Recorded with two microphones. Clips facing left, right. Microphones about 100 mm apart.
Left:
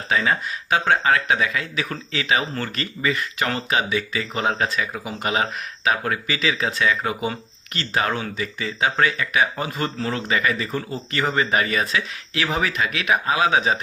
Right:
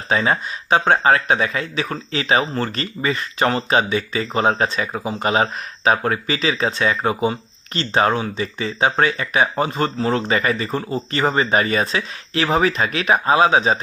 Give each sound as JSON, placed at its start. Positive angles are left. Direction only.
{"t": 0.1, "sound": "speech", "side_deg": -30}